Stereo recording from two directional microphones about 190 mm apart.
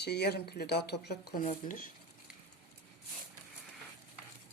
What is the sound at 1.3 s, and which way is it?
Speech, 45° left (ahead or behind).